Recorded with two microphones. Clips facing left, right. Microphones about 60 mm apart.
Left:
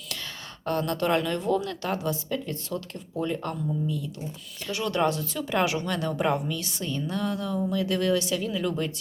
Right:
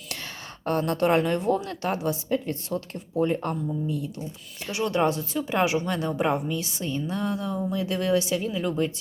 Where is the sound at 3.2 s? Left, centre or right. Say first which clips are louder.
Right 5 dB; right.